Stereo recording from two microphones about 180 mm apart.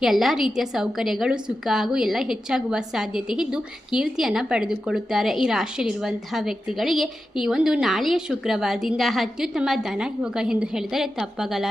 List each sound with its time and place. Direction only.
0.0 s a woman's voice: centre (ahead or behind)